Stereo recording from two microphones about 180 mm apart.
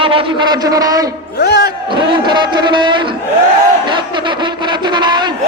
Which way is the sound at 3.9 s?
25° right (ahead or behind).